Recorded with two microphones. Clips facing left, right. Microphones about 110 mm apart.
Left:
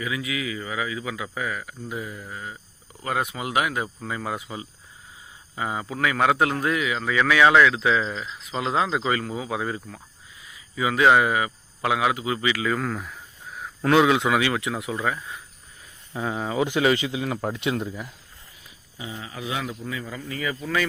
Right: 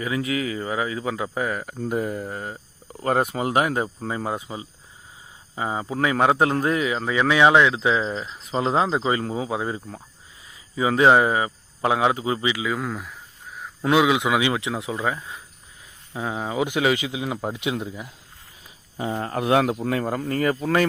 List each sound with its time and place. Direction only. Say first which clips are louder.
0.0 s a man's voice: right 4 dB; 40° right (ahead or behind); by 12.6 s 25° right (ahead or behind)
12.6 s a sound: left 1 dB; 5° right (ahead or behind)
13.8 s speech: even; 5° right (ahead or behind)
18.9 s speech: right 10 dB; 55° right (ahead or behind)